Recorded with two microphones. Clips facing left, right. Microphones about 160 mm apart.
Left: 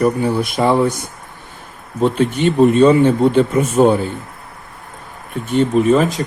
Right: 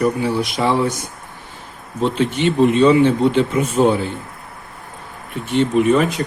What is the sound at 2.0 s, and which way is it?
Speech, 50° left (ahead or behind).